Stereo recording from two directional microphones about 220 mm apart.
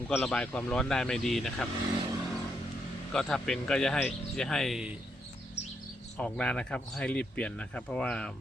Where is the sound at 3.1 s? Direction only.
5° left (ahead or behind).